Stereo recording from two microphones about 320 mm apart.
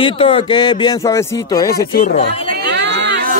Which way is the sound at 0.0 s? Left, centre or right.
Centre.